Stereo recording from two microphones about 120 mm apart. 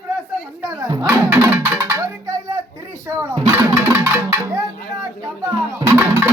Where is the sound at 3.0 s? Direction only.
20° right (ahead or behind).